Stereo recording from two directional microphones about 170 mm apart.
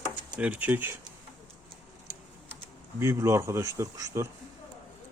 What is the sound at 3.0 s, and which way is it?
Speech, 15° right (ahead or behind).